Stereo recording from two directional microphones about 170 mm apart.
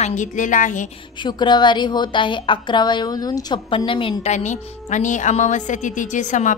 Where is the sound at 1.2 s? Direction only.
25° left (ahead or behind).